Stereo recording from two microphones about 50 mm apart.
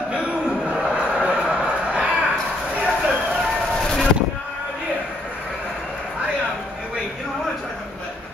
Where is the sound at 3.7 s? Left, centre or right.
Centre.